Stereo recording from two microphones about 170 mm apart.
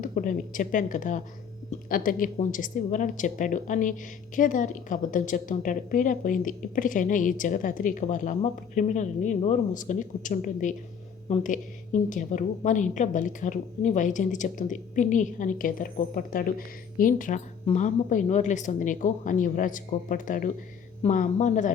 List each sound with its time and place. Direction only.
0.0 s a woman's voice: 50° left (ahead or behind)